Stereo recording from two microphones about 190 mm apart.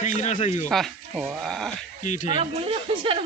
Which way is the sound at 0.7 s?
Centre (ahead or behind).